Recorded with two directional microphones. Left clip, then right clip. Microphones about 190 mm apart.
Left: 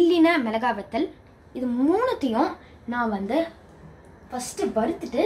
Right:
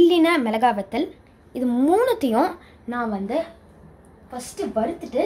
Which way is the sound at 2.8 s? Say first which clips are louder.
Even; 25° right (ahead or behind).